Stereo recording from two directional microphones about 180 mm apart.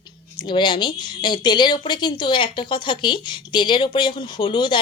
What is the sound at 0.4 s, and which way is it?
Speech, 25° left (ahead or behind).